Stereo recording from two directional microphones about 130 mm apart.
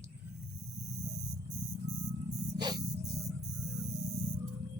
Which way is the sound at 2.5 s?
35° right (ahead or behind).